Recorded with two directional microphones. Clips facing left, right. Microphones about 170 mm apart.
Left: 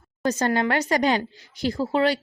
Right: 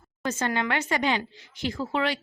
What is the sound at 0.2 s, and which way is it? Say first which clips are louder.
Speech: left 5 dB; 40° left (ahead or behind).